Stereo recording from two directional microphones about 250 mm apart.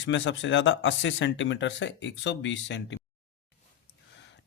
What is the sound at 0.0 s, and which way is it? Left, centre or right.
Speech, left.